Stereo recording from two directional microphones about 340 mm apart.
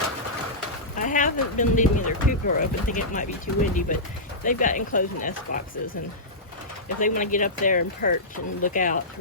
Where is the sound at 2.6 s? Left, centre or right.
Left.